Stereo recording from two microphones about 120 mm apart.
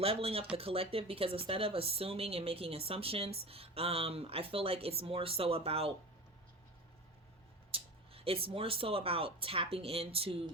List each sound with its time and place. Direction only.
0.0 s speech: 55° right (ahead or behind)
7.7 s speech: 50° right (ahead or behind)